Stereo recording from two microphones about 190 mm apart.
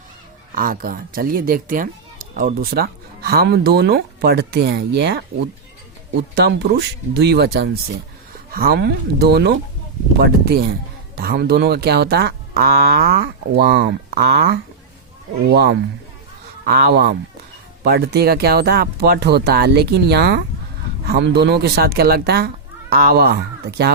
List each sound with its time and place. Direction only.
0.5 s speech: 45° right (ahead or behind)
6.3 s speech: 60° right (ahead or behind)